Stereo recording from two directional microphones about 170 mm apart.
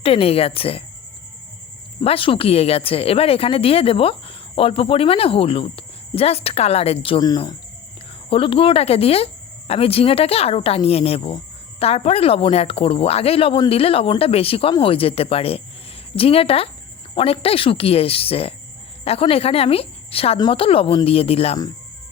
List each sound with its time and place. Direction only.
0.0 s speech: 35° left (ahead or behind)
2.0 s speech: 30° left (ahead or behind)